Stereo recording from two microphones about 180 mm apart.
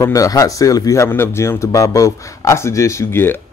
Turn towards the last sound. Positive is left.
turn(degrees=10)  # may be behind; listen again after turning